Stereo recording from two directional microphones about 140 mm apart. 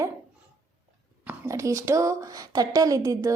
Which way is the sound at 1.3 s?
20° right (ahead or behind).